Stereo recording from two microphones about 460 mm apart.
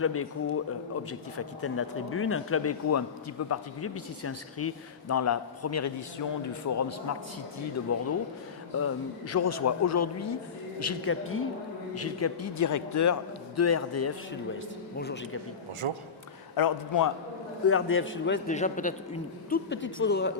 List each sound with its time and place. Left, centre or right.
0.0 s a man's voice: left
9.3 s a man's voice: left
14.9 s a man's voice: left
15.8 s a man's voice: right
16.6 s a man's voice: left
17.7 s a man's voice: left